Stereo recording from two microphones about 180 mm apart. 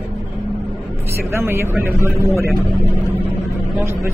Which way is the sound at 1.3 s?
15° right (ahead or behind).